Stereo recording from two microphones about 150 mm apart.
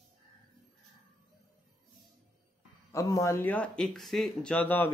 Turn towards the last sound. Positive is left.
turn(degrees=10)  # may be behind; listen again after turning